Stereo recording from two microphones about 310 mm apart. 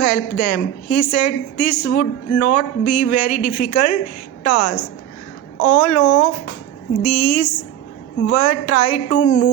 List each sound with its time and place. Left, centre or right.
0.0 s a woman's voice: left